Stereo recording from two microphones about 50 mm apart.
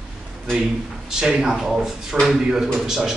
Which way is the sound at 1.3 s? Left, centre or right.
Centre.